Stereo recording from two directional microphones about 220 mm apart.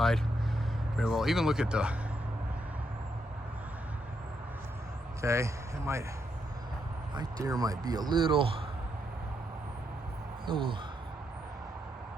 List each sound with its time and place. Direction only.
0.9 s speech: centre (ahead or behind)
5.2 s speech: 15° right (ahead or behind)
7.2 s speech: 15° right (ahead or behind)
10.4 s speech: 25° right (ahead or behind)